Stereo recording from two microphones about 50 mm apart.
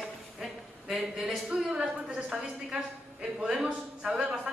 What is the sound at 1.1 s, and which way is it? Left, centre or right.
A woman's voice, centre.